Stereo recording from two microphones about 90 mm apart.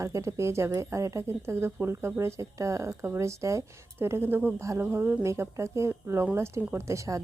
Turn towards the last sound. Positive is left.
turn(degrees=-35)  # may be behind; listen again after turning